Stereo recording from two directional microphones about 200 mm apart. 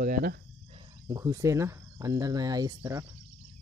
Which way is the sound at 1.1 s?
15° right (ahead or behind).